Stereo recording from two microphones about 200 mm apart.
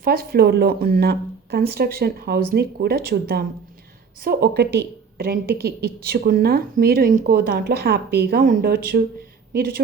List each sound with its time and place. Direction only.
0.0 s speech: 50° right (ahead or behind)